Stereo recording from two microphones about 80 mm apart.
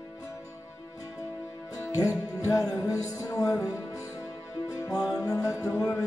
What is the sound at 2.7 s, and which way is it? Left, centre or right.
Music, left.